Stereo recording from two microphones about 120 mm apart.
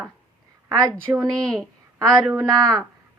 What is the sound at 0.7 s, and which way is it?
Speech, 30° right (ahead or behind).